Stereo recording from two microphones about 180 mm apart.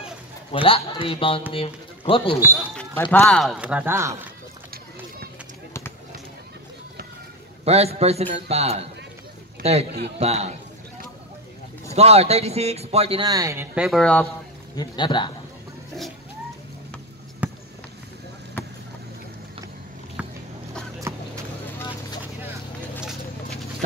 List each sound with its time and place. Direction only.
0.5 s a man's voice: 30° left (ahead or behind)
2.7 s speech: 5° left (ahead or behind); by 4.2 s 15° right (ahead or behind)
7.6 s a man's voice: 35° right (ahead or behind)
11.9 s a man's voice: 35° right (ahead or behind); by 13.8 s 15° right (ahead or behind)
13.8 s speech: 5° left (ahead or behind)
14.8 s a man's voice: 25° left (ahead or behind)
17.4 s basketball bounce: 10° right (ahead or behind)
20.2 s a sound: 10° right (ahead or behind)